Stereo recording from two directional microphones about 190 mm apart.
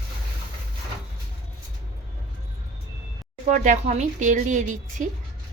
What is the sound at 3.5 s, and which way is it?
A woman's voice, 40° right (ahead or behind).